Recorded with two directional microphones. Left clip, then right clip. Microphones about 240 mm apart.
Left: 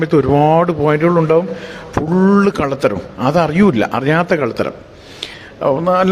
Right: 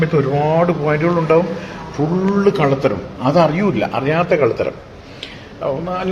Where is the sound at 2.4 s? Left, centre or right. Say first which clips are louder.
Even; left.